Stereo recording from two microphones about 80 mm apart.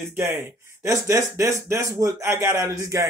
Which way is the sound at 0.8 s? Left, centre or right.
Right.